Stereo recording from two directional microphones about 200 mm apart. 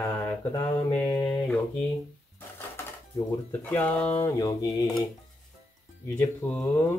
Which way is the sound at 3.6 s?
10° left (ahead or behind).